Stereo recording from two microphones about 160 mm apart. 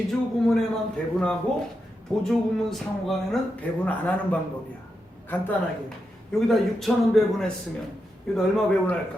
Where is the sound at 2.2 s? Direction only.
Centre (ahead or behind).